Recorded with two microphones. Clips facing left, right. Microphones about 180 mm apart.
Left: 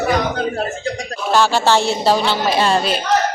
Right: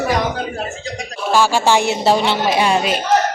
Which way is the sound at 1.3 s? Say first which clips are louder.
Even; 10° right (ahead or behind).